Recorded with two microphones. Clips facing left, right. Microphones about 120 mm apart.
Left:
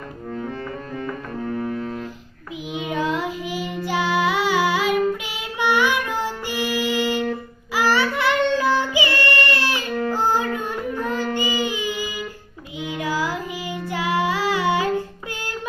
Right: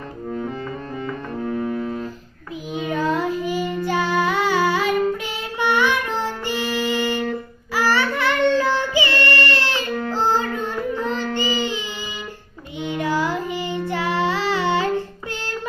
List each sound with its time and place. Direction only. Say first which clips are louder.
0.9 s music: right 1 dB; 15° right (ahead or behind)
2.7 s child singing: right 2 dB; 10° left (ahead or behind)
7.3 s music: even; 15° left (ahead or behind)
10.1 s child singing: even; 10° left (ahead or behind)